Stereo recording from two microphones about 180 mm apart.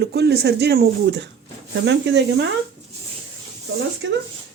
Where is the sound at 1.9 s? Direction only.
80° right.